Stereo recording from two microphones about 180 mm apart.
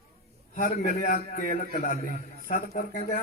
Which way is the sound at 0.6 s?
55° left (ahead or behind).